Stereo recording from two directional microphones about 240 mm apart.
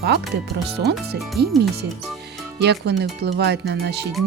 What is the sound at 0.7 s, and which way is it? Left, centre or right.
Speech, right.